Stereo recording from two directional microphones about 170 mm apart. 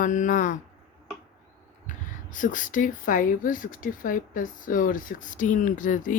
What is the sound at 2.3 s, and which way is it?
Speech, 50° left (ahead or behind).